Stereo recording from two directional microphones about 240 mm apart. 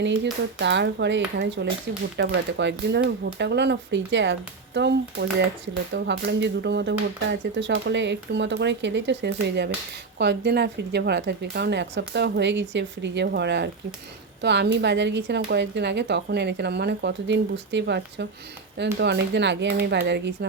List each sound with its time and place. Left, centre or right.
0.6 s speech: right